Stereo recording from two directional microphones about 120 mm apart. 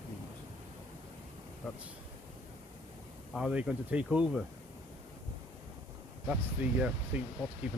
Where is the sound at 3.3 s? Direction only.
5° right (ahead or behind).